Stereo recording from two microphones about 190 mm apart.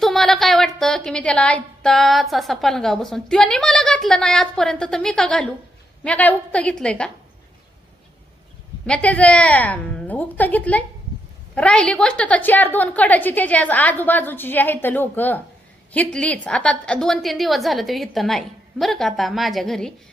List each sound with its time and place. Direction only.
0.0 s a sound: centre (ahead or behind)
2.3 s a woman's voice: centre (ahead or behind)
8.9 s a woman's voice: 5° left (ahead or behind)